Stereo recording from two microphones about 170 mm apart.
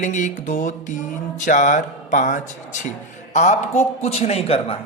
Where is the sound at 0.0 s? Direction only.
45° left (ahead or behind).